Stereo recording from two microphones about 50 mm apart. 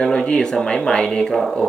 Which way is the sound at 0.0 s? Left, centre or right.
Centre.